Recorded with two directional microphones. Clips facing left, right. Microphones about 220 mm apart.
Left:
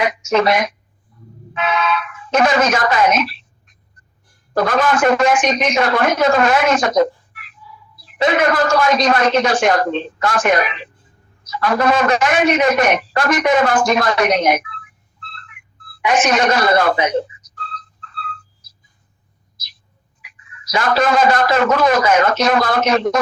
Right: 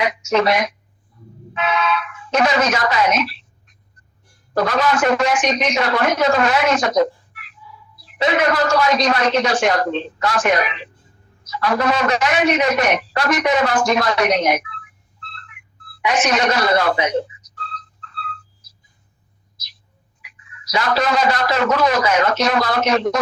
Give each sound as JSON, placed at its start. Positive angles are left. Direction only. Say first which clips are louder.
{"t": 0.0, "sound": "a man's voice", "louder": "left 2 dB", "side_deg": 50}
{"t": 4.5, "sound": "a man's voice", "louder": "left 2 dB", "side_deg": 50}
{"t": 16.0, "sound": "a man's voice", "louder": "left 3 dB", "side_deg": 50}
{"t": 20.7, "sound": "a man's voice", "louder": "left 3 dB", "side_deg": 50}